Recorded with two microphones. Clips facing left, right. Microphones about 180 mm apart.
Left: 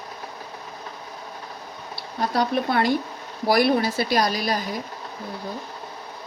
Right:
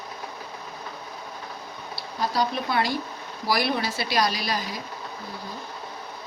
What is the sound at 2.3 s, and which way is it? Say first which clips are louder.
Speech: left 4 dB; 55° left (ahead or behind).